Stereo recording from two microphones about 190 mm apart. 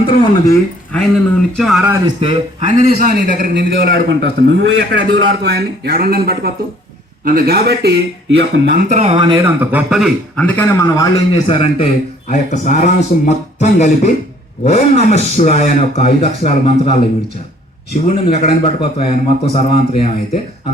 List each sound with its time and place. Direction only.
0.0 s speech: 25° left (ahead or behind)
0.9 s speech: 5° left (ahead or behind)
2.0 s a man's voice: 30° right (ahead or behind)
3.0 s a man's voice: 50° right (ahead or behind)
9.0 s speech: 30° right (ahead or behind)
9.4 s speech: 10° right (ahead or behind)
10.4 s a man's voice: 10° left (ahead or behind)
11.4 s a man's voice: 30° left (ahead or behind)
18.3 s speech: 30° left (ahead or behind)